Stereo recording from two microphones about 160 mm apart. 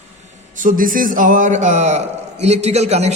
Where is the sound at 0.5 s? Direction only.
60° right (ahead or behind).